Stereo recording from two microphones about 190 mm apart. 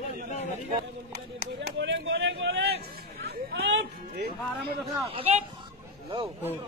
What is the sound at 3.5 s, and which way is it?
Music, 65° right (ahead or behind).